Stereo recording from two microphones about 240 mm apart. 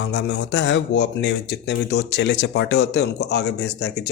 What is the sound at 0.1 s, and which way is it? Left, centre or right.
Speech, left.